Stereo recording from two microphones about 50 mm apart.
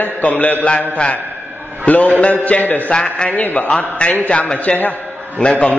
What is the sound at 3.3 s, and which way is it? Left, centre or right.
Speech, left.